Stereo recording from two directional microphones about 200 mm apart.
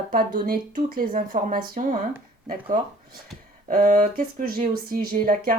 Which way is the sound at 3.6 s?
40° right (ahead or behind).